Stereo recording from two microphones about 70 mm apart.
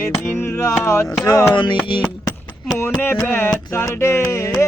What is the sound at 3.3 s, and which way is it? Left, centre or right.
Music, left.